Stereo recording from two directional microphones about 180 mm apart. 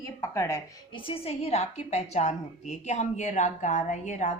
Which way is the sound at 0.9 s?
30° left (ahead or behind).